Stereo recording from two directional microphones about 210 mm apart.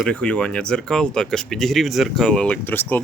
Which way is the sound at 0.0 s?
5° left (ahead or behind).